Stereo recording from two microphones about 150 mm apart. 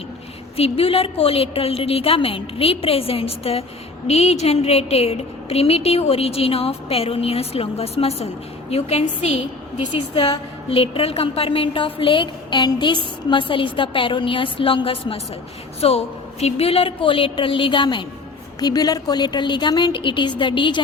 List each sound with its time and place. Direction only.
0.5 s a woman's voice: 40° left (ahead or behind)